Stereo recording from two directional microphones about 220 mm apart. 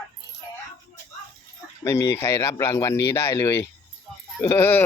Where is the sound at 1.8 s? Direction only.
15° left (ahead or behind).